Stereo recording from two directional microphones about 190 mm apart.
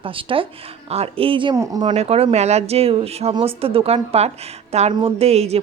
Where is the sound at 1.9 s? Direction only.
30° right (ahead or behind).